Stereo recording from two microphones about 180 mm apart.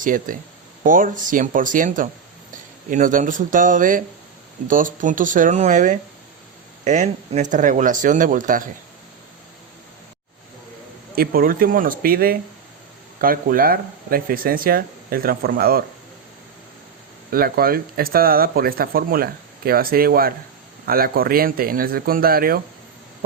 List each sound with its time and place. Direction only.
0.0 s speech: 50° right (ahead or behind)
11.1 s speech: 55° right (ahead or behind)
17.3 s speech: 55° right (ahead or behind)